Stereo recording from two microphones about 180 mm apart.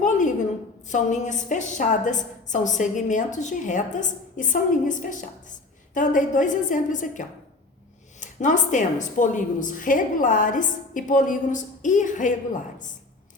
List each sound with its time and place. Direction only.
0.9 s a woman's voice: 40° left (ahead or behind)